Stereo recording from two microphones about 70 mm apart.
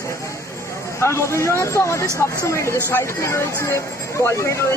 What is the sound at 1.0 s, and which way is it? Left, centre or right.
A man's voice, left.